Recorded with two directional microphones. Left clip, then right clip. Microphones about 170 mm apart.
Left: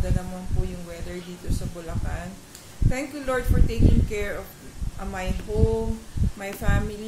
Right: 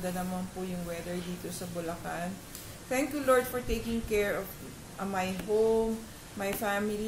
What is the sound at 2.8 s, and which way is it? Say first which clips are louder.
A woman's voice: right 1 dB; 15° left (ahead or behind).